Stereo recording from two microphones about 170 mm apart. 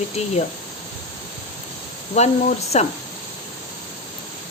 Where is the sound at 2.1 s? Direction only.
40° left (ahead or behind).